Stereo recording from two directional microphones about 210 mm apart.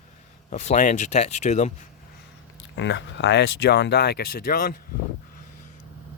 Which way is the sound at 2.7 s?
60° left (ahead or behind).